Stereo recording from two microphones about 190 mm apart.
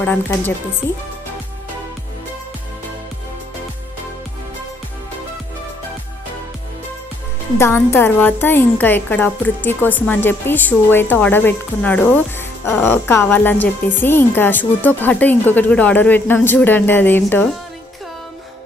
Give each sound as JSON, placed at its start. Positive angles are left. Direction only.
{"t": 0.0, "sound": "a woman's voice", "side_deg": 10}
{"t": 7.5, "sound": "a woman's voice", "side_deg": 15}